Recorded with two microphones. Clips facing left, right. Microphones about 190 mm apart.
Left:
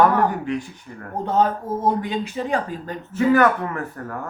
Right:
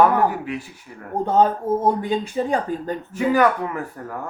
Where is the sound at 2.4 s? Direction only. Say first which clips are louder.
Right 4 dB; 30° right (ahead or behind).